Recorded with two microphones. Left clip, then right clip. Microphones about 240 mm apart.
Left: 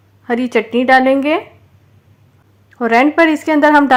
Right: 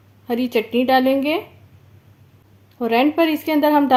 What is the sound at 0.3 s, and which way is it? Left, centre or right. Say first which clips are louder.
Speech: left 5 dB; centre.